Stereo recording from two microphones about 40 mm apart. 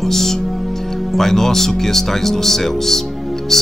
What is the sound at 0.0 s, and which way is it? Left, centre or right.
Speech, centre.